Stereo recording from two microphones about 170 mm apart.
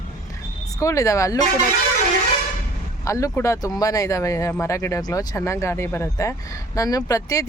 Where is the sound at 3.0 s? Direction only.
20° left (ahead or behind).